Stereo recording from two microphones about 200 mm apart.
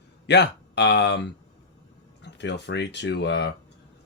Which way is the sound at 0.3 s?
60° left (ahead or behind).